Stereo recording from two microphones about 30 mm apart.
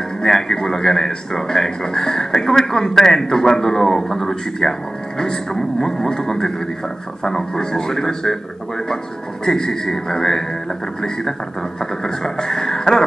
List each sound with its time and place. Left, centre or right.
0.2 s speech: centre
9.5 s speech: centre
11.8 s speech: centre